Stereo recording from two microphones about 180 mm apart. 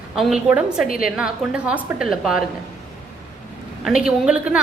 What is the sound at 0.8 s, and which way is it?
Speech, 50° left (ahead or behind).